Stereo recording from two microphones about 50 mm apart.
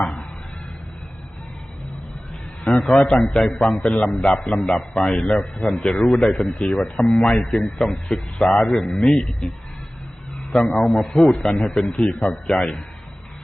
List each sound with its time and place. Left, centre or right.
0.0 s a sound: left
2.9 s a man's voice: centre
5.7 s a man's voice: centre
8.4 s a man's voice: left
8.7 s a man's voice: centre
10.5 s a man's voice: centre
11.0 s a man's voice: centre